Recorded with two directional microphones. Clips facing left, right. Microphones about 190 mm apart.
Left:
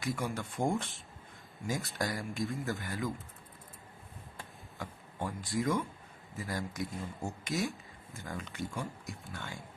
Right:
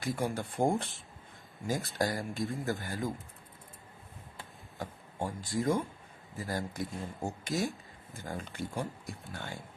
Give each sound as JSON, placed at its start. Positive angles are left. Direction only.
{"t": 0.0, "sound": "speech", "side_deg": -35}
{"t": 2.2, "sound": "a man's voice", "side_deg": 0}
{"t": 2.6, "sound": "speech", "side_deg": -35}
{"t": 4.8, "sound": "speech", "side_deg": -30}